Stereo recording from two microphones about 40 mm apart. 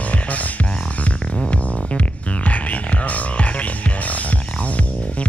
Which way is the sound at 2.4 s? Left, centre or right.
Left.